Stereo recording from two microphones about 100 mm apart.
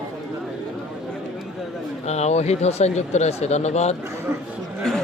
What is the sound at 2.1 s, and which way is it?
Speech, 90° left.